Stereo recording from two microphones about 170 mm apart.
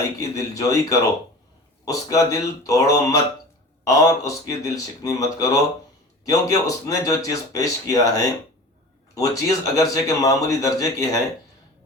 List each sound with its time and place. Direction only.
0.2 s a man's voice: 20° left (ahead or behind)